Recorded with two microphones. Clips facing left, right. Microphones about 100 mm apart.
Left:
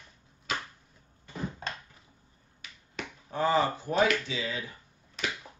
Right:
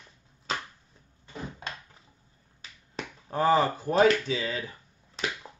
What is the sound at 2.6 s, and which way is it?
Finger snapping, 40° right (ahead or behind).